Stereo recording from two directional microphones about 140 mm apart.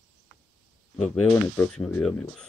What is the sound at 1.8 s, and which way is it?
Speech, 5° left (ahead or behind).